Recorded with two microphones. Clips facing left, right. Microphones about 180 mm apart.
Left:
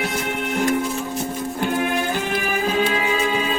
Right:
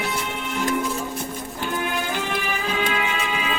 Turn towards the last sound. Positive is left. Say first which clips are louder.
# left 5 dB
turn(degrees=40)  # may be behind; listen again after turning